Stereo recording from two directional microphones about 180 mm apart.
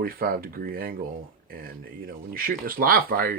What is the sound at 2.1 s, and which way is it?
Speech, 50° right (ahead or behind).